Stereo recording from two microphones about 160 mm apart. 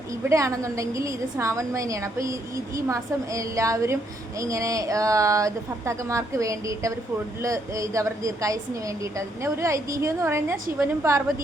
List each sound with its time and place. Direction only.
0.3 s a woman's voice: 20° right (ahead or behind)